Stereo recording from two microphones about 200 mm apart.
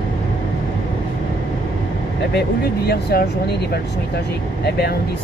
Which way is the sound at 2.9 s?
50° left (ahead or behind).